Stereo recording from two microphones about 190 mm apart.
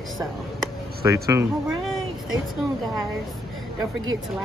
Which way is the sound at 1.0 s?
15° right (ahead or behind).